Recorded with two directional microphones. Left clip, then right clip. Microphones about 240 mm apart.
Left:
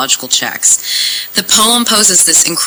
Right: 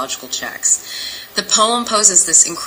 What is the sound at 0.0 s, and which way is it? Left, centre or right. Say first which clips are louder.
Speech: left 10 dB; left.